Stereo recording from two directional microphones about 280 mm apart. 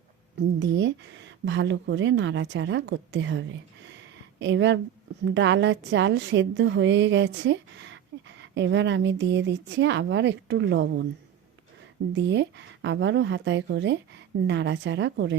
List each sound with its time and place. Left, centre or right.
0.3 s a woman's voice: right
12.1 s a woman's voice: right